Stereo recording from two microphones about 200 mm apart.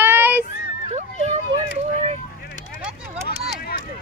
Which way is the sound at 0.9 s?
35° right (ahead or behind).